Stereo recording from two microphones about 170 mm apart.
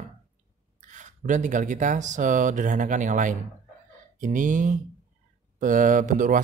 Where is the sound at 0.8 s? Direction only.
45° right (ahead or behind).